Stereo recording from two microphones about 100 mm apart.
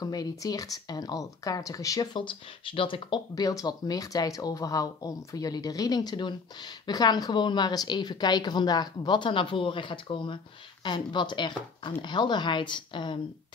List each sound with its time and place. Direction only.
0.0 s speech: 40° left (ahead or behind)
2.1 s speech: 60° left (ahead or behind)
3.3 s speech: 40° left (ahead or behind)